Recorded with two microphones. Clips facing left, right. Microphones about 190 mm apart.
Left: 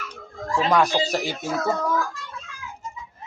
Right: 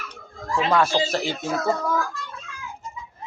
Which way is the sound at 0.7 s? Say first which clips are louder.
Even; 15° left (ahead or behind).